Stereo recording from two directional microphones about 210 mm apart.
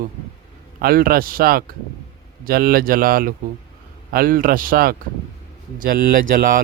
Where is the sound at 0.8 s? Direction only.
45° right (ahead or behind).